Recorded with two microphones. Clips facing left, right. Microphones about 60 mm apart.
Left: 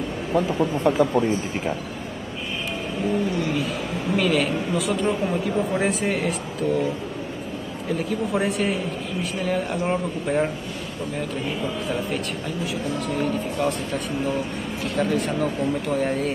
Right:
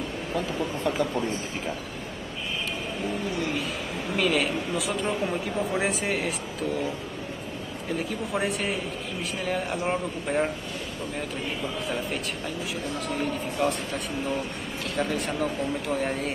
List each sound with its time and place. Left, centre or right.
0.6 s speech: left
3.3 s speech: centre
7.9 s speech: centre
13.0 s speech: centre